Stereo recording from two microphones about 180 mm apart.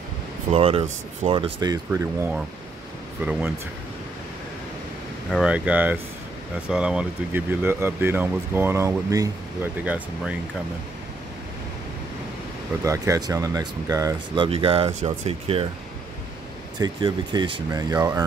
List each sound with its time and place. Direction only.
0.5 s speech: 35° right (ahead or behind)
1.9 s speech: 10° right (ahead or behind)
5.3 s speech: 5° right (ahead or behind)
12.8 s speech: 15° right (ahead or behind); by 15.6 s 35° right (ahead or behind)
16.7 s speech: 25° right (ahead or behind)